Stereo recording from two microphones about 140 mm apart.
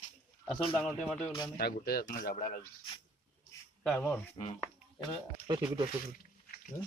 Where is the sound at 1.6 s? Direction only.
90° left; by 2.6 s 70° left (ahead or behind).